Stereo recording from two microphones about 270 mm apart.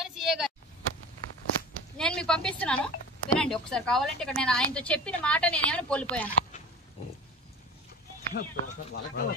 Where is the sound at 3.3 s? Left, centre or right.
Centre.